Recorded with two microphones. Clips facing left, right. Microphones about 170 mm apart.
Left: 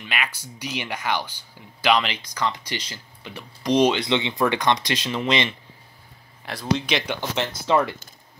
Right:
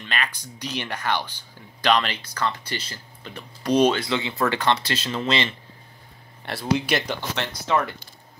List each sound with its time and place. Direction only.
0.0 s speech: 10° left (ahead or behind)
6.4 s speech: 5° right (ahead or behind)
7.7 s speech: 25° left (ahead or behind)